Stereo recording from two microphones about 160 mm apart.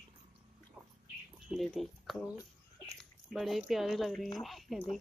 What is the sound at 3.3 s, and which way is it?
Speech, centre (ahead or behind).